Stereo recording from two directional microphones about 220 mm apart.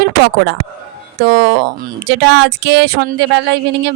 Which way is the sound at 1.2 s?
55° right (ahead or behind).